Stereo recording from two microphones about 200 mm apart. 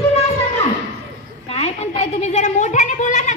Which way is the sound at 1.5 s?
30° left (ahead or behind).